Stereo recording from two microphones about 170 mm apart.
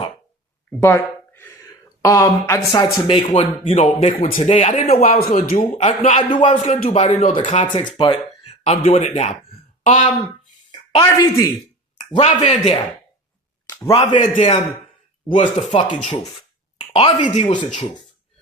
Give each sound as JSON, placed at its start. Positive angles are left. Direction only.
{"t": 0.8, "sound": "speech", "side_deg": 15}
{"t": 4.2, "sound": "speech", "side_deg": 50}
{"t": 4.5, "sound": "speech", "side_deg": 35}
{"t": 10.7, "sound": "a woman's voice", "side_deg": 25}
{"t": 12.1, "sound": "speech", "side_deg": 35}
{"t": 13.7, "sound": "a sound", "side_deg": 15}
{"t": 13.9, "sound": "speech", "side_deg": 30}